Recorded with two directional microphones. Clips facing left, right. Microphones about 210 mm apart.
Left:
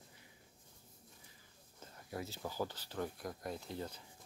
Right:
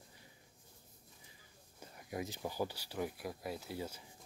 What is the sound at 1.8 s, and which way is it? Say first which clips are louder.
Speech: right 2 dB; 15° right (ahead or behind).